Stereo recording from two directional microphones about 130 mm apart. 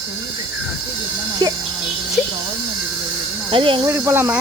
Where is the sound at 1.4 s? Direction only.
35° right (ahead or behind).